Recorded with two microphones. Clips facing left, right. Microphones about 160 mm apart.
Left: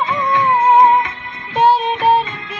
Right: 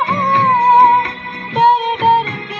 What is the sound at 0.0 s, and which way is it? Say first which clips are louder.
Music of bollywood: right 1 dB; 25° right (ahead or behind).